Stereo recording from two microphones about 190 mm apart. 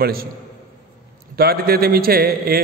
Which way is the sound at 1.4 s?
55° right (ahead or behind).